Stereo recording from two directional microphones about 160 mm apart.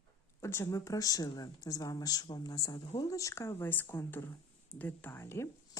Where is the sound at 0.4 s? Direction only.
15° left (ahead or behind).